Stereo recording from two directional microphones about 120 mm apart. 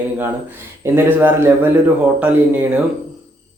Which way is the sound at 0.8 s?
20° right (ahead or behind).